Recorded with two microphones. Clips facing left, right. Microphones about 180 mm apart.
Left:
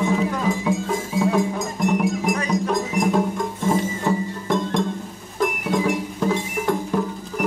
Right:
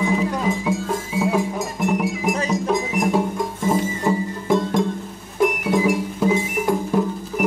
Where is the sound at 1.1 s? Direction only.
5° right (ahead or behind).